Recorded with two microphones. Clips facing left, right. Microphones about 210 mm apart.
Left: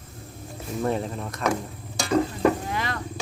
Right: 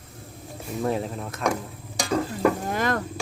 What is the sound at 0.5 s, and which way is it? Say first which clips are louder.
Speech: even; centre (ahead or behind).